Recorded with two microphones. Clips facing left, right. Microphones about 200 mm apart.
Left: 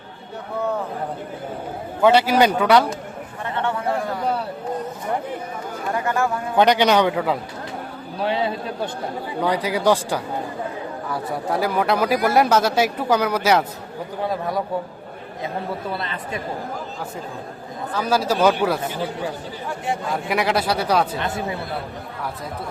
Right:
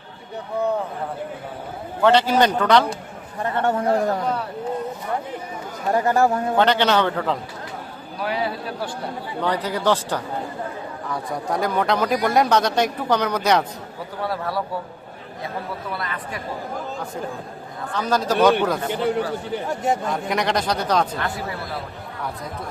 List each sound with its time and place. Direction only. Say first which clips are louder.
2.0 s speech: left 1 dB; 10° left (ahead or behind)
3.4 s a sound: right 3 dB; 45° right (ahead or behind)
5.9 s speech: right 5 dB; 35° right (ahead or behind)
6.6 s speech: left 3 dB; 15° left (ahead or behind)
8.2 s a man's voice: left 2 dB; 25° left (ahead or behind)
9.4 s speech: left 2 dB; 10° left (ahead or behind)
14.2 s speech: left 2 dB; 15° left (ahead or behind)
15.9 s a man's voice: left 2 dB; 25° left (ahead or behind)
17.9 s speech: even; 5° left (ahead or behind)
19.6 s speech: right 3 dB; 40° right (ahead or behind)
20.1 s speech: left 1 dB; 5° left (ahead or behind)
21.2 s a man's voice: left 2 dB; 20° left (ahead or behind)